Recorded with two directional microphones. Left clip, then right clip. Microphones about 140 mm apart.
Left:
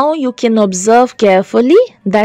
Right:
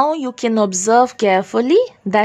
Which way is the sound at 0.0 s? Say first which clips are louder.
Left 4 dB; 45° left (ahead or behind).